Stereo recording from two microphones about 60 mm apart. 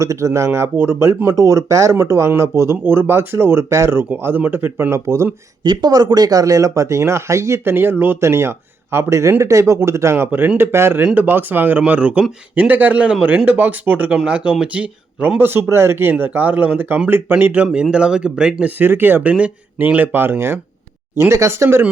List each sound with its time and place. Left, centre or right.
0.0 s speech: right
1.4 s speech: right
2.8 s speech: right
4.1 s speech: right
5.9 s speech: right
8.2 s speech: right
11.0 s speech: right
15.4 s speech: right
17.9 s speech: centre
18.6 s speech: right